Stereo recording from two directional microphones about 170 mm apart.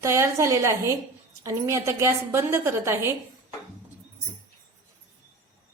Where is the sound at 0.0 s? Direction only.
15° right (ahead or behind).